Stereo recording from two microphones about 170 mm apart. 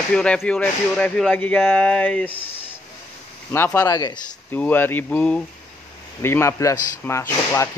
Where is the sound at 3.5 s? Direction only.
15° left (ahead or behind).